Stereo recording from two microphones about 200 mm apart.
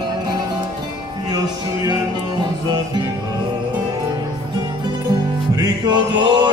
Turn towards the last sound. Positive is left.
turn(degrees=-20)  # may be behind; listen again after turning